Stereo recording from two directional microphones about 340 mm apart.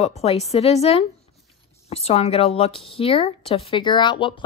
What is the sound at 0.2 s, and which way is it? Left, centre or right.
A woman's voice, centre.